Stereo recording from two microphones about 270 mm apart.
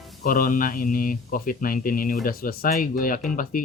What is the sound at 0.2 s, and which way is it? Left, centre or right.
Speech, left.